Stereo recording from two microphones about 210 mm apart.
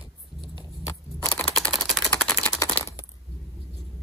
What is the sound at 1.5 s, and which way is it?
Typing, centre (ahead or behind).